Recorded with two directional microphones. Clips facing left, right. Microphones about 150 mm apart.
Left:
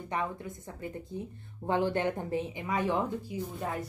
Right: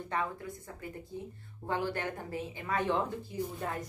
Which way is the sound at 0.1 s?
20° left (ahead or behind).